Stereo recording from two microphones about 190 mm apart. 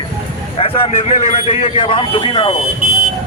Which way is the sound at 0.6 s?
30° left (ahead or behind).